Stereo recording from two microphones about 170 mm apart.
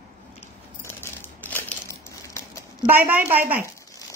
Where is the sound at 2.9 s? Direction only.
10° right (ahead or behind).